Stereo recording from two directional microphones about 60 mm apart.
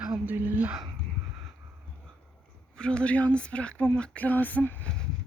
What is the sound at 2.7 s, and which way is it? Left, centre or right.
Speech, centre.